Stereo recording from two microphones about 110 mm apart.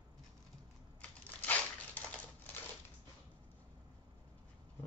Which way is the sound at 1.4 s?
15° left (ahead or behind).